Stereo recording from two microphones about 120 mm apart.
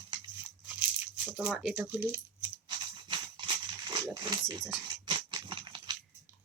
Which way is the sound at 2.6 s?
40° right (ahead or behind).